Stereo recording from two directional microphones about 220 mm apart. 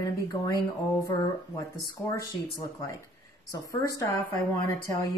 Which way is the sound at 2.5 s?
15° left (ahead or behind).